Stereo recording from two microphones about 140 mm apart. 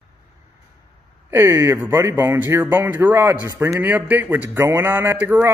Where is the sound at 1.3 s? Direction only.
15° right (ahead or behind).